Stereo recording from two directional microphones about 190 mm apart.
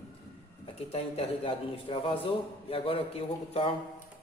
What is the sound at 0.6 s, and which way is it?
A man's voice, 30° left (ahead or behind).